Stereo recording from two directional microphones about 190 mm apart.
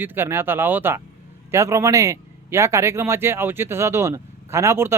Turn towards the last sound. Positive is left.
turn(degrees=-15)  # may be behind; listen again after turning